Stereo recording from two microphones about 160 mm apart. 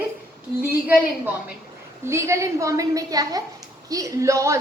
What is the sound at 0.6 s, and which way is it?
A woman's voice, 10° right (ahead or behind).